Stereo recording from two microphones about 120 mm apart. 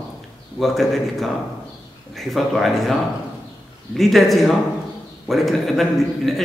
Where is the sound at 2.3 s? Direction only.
Centre (ahead or behind).